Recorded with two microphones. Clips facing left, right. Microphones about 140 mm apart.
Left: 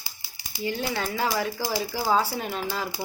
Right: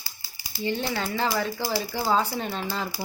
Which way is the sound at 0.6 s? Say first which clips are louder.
Right 1 dB; 5° left (ahead or behind).